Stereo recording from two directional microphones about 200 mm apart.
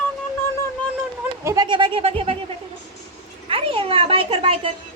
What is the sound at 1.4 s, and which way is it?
Speech, 15° right (ahead or behind).